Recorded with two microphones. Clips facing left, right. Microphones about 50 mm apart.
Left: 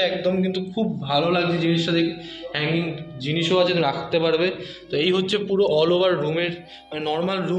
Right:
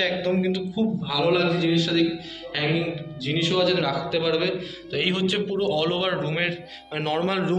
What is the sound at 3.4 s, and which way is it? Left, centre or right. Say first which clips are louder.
Speech: left 3 dB; left.